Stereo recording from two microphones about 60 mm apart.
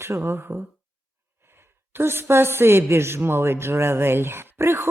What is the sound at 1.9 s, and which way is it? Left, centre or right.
A woman's voice, right.